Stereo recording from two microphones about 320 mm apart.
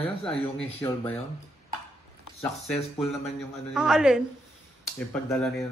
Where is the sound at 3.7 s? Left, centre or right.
Centre.